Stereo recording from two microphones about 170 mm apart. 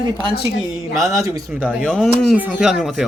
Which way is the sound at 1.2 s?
20° right (ahead or behind).